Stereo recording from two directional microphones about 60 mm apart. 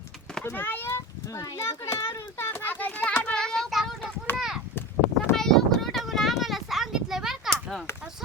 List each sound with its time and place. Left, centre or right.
0.5 s a child's voice: left
1.3 s a child's voice: left
1.5 s a child's voice: left
3.2 s child singing: centre
3.7 s child singing: centre
4.4 s a sound: centre
5.3 s a sound: centre
7.5 s chop: centre